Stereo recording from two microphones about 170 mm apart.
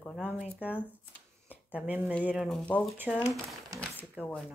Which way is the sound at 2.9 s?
10° right (ahead or behind).